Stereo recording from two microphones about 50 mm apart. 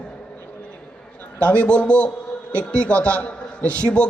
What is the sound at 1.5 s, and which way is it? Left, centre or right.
A man's voice, left.